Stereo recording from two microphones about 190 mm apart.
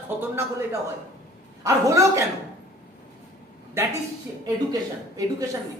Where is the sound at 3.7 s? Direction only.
15° right (ahead or behind).